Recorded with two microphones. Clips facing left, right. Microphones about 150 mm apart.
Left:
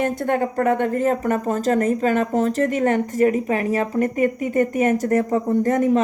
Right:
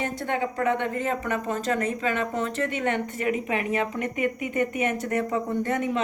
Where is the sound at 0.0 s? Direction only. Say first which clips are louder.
Left 7 dB; 50° left (ahead or behind).